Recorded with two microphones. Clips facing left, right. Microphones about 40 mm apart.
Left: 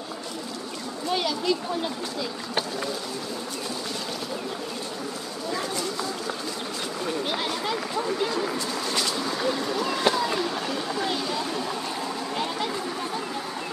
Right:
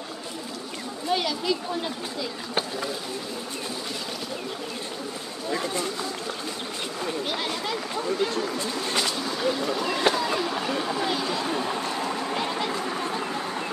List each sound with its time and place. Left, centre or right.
1.1 s speech: centre
7.1 s speech: centre
8.5 s speech: right
9.2 s speech: centre